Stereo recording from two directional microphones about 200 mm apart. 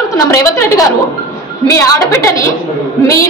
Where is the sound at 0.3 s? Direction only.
15° left (ahead or behind).